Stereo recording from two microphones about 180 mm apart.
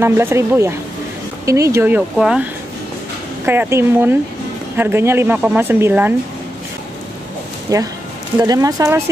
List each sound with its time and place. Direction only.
0.0 s speech: 15° right (ahead or behind)
3.4 s speech: 10° right (ahead or behind)
7.7 s speech: 20° right (ahead or behind)